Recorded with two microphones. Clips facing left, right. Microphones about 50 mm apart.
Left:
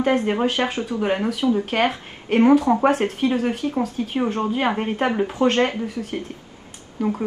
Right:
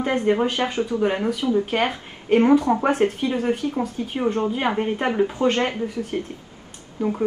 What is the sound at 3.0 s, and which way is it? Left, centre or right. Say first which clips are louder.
Speech: right 3 dB; left.